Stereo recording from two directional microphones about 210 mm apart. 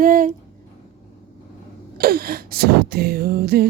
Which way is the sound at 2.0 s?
45° right (ahead or behind).